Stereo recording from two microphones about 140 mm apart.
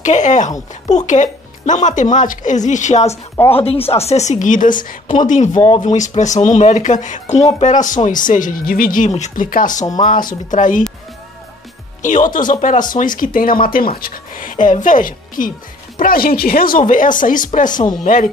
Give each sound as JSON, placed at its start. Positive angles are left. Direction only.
{"t": 0.0, "sound": "speech", "side_deg": 60}
{"t": 3.5, "sound": "speech", "side_deg": 45}
{"t": 5.5, "sound": "speech", "side_deg": 30}
{"t": 5.8, "sound": "speech", "side_deg": 60}
{"t": 12.0, "sound": "speech", "side_deg": 65}
{"t": 16.0, "sound": "speech", "side_deg": 90}
{"t": 17.6, "sound": "speech", "side_deg": 30}
{"t": 18.0, "sound": "speech", "side_deg": 65}